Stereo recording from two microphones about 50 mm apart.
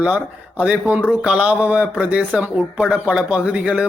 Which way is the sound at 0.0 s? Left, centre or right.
Right.